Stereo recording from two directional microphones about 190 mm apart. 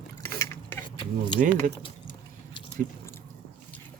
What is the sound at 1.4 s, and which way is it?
Speech, 40° right (ahead or behind).